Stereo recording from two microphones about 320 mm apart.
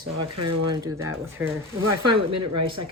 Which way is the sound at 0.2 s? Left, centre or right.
Right.